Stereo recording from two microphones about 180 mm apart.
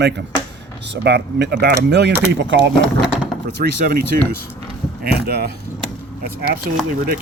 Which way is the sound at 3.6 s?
55° right (ahead or behind).